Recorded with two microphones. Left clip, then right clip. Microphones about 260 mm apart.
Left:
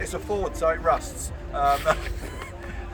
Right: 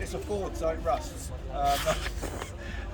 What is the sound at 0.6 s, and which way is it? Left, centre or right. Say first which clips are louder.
A man's voice: left 8 dB; centre.